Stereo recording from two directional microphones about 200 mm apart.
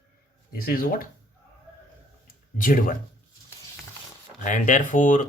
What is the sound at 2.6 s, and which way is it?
Speech, 45° left (ahead or behind).